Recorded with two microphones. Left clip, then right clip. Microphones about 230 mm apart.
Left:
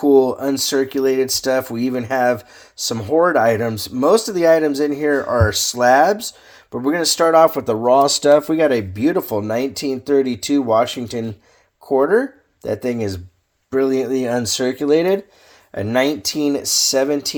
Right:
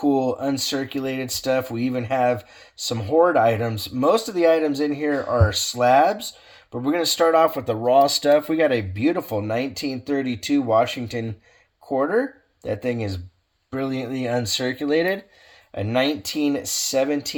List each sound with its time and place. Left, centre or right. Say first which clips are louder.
0.0 s speech: left 7 dB; left
13.7 s speech: left 10 dB; left